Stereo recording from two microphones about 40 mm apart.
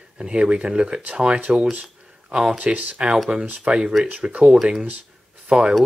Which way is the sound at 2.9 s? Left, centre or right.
Right.